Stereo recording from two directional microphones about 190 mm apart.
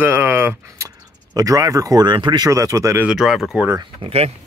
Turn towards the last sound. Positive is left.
turn(degrees=-30)  # may be behind; listen again after turning